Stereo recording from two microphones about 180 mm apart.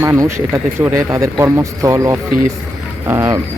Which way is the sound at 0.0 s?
15° right (ahead or behind).